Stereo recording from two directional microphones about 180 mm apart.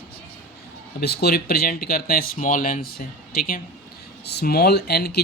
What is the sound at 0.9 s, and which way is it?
Speech, 60° left (ahead or behind).